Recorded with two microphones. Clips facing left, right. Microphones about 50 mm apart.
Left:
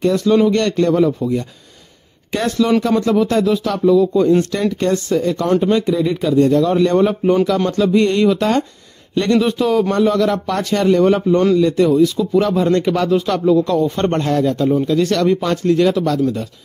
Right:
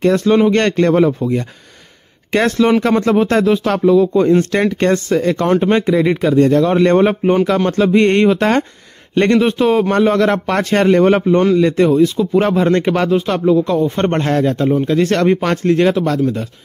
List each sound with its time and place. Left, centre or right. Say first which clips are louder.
0.0 s speech: right 2 dB; right
2.3 s a man's voice: right 3 dB; right
13.1 s speech: even; right
14.2 s a man's voice: right 1 dB; right